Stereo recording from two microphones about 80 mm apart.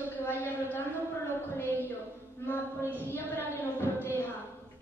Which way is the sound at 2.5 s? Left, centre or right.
Left.